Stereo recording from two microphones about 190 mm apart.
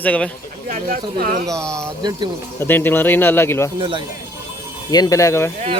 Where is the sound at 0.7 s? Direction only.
50° right (ahead or behind).